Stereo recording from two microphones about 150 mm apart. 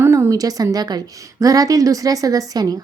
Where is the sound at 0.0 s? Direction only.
20° right (ahead or behind).